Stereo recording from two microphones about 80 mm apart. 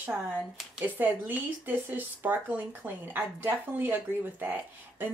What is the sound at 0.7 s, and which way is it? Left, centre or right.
Speech, right.